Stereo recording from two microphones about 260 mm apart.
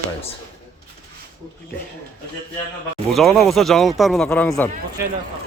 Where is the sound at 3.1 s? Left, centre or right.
Centre.